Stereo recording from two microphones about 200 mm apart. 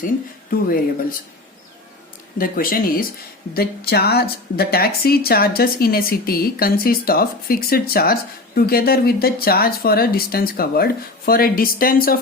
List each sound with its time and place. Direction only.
2.4 s speech: 45° left (ahead or behind)